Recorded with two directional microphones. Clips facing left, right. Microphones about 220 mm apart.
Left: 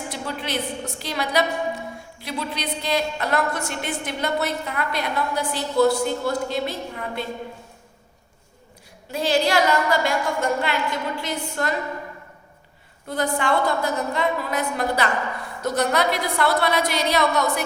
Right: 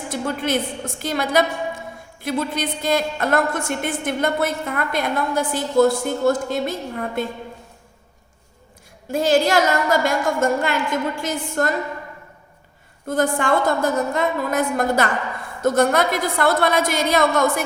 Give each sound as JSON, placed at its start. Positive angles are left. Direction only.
{"t": 0.1, "sound": "a woman's voice", "side_deg": -50}
{"t": 9.0, "sound": "a woman's voice", "side_deg": -45}
{"t": 13.1, "sound": "a woman's voice", "side_deg": -45}